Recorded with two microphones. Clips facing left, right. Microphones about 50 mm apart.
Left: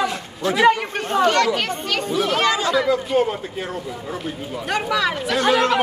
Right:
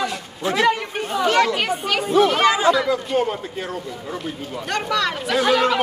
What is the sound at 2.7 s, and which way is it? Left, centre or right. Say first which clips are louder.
Speech: left 2 dB; centre.